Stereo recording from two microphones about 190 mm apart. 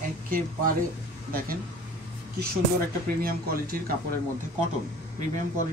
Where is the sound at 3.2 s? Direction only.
50° right (ahead or behind).